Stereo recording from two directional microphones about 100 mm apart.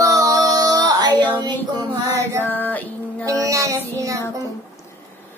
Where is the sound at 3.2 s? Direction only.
35° right (ahead or behind).